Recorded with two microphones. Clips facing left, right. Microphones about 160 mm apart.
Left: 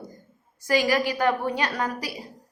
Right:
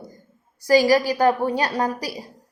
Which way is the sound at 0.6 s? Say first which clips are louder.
Right 6 dB; 35° right (ahead or behind).